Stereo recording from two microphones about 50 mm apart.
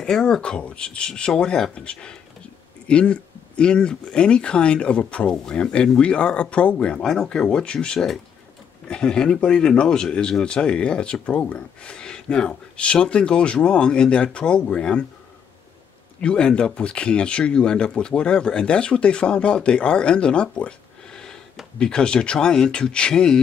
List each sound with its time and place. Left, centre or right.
0.0 s speech: centre
16.2 s speech: centre
21.1 s a sound: centre
21.7 s speech: centre